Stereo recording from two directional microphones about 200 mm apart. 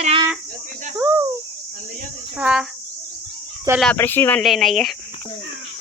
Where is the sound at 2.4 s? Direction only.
5° right (ahead or behind).